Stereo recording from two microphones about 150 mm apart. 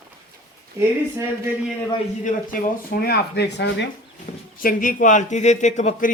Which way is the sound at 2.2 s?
70° left (ahead or behind).